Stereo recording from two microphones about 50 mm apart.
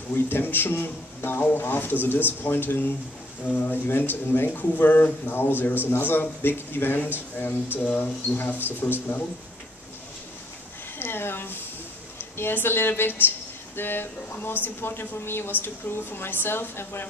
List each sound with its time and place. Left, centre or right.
0.1 s speech: left
11.0 s speech: left